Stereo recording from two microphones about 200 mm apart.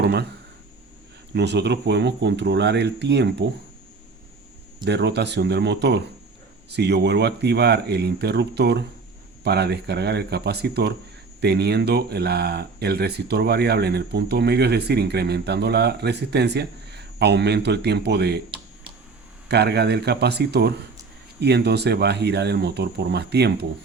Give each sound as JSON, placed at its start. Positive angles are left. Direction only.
{"t": 0.0, "sound": "speech", "side_deg": -55}
{"t": 1.3, "sound": "speech", "side_deg": -60}
{"t": 4.9, "sound": "speech", "side_deg": -60}
{"t": 19.5, "sound": "speech", "side_deg": -55}